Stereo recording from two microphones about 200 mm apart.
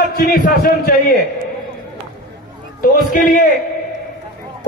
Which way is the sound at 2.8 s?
45° left (ahead or behind).